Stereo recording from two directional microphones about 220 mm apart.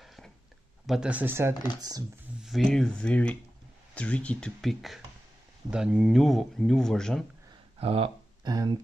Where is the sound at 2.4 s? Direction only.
Centre (ahead or behind).